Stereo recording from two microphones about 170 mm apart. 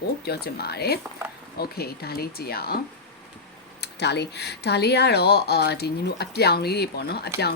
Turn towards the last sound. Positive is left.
turn(degrees=70)  # may be behind; listen again after turning